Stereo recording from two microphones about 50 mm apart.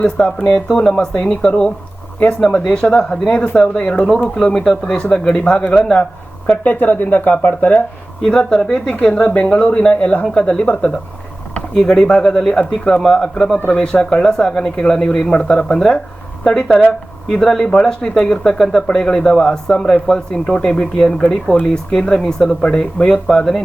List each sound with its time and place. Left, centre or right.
0.2 s speech: centre
6.5 s speech: left
8.2 s speech: centre
9.1 s speech: left
11.7 s speech: centre